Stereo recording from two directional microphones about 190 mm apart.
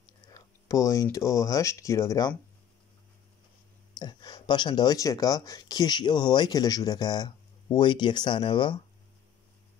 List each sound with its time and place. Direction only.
0.3 s a sound: 15° left (ahead or behind)
1.1 s speech: 15° left (ahead or behind)
4.0 s speech: 20° left (ahead or behind)